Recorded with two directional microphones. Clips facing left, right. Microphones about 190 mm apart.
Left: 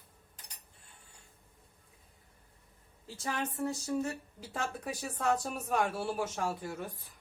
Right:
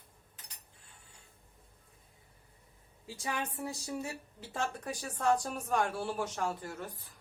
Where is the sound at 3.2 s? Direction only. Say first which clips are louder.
Left 3 dB; 10° right (ahead or behind).